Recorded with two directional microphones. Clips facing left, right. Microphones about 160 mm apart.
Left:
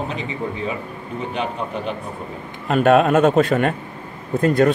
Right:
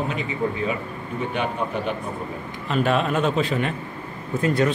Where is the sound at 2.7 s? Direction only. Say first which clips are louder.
Left 7 dB; 50° left (ahead or behind).